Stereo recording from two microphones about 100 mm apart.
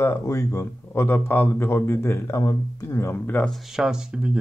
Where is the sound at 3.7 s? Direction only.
5° right (ahead or behind).